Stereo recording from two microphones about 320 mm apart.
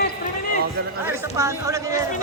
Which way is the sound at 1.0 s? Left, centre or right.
Centre.